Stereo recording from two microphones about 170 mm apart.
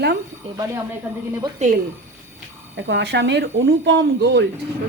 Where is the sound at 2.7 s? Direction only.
90° right.